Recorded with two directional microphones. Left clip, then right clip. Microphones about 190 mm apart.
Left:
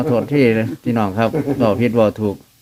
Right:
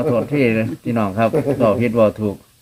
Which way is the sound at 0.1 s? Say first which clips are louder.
Left 4 dB; 35° left (ahead or behind).